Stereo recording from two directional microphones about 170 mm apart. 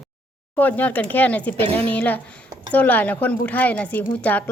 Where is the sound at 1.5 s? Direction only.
35° right (ahead or behind).